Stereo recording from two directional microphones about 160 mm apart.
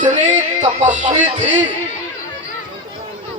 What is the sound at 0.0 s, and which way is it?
Music, 45° right (ahead or behind).